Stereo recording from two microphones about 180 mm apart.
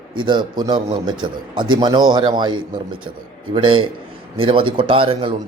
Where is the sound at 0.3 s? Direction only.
25° right (ahead or behind).